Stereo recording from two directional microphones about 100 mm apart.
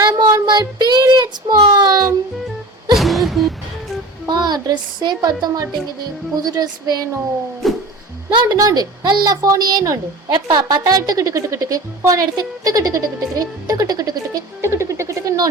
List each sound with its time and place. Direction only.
0.0 s child singing: 40° right (ahead or behind)
2.9 s a sound: centre (ahead or behind)
4.3 s a child's voice: 45° right (ahead or behind)
7.6 s music: centre (ahead or behind)
8.4 s a woman's voice: 40° right (ahead or behind)
14.6 s a sound: 30° right (ahead or behind)